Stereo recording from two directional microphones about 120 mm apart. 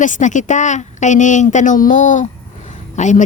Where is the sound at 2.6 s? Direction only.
85° left.